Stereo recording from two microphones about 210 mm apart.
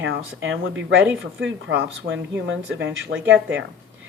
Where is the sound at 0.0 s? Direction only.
60° right (ahead or behind).